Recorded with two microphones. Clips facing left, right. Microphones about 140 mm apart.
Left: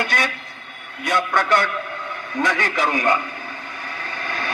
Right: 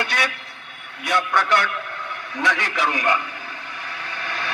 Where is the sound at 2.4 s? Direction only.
50° left (ahead or behind).